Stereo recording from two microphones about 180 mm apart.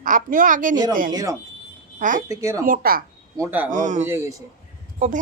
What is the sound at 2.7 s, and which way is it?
Speech, 55° right (ahead or behind).